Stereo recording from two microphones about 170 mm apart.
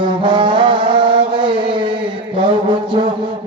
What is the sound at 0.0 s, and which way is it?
Brass instrument, 30° right (ahead or behind).